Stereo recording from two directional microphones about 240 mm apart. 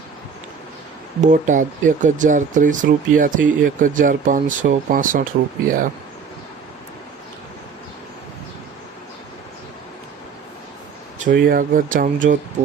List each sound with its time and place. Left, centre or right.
1.2 s speech: right
11.3 s speech: right